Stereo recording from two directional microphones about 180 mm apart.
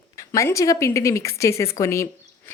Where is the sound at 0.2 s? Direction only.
15° left (ahead or behind).